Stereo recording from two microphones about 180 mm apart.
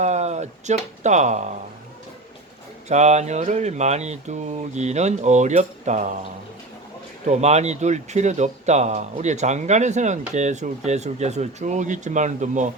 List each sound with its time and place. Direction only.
0.0 s speech: 40° right (ahead or behind)
2.9 s speech: 40° right (ahead or behind)
7.3 s speech: 40° right (ahead or behind)